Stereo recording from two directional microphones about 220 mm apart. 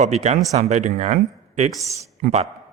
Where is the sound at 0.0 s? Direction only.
30° right (ahead or behind).